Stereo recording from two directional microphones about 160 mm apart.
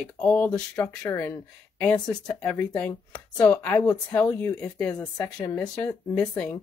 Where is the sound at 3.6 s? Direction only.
15° left (ahead or behind).